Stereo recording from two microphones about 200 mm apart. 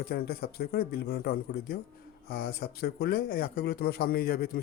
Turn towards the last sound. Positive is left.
turn(degrees=50)  # may be behind; listen again after turning